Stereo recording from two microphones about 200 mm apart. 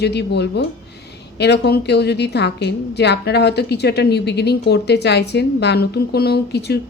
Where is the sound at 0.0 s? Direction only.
55° left (ahead or behind).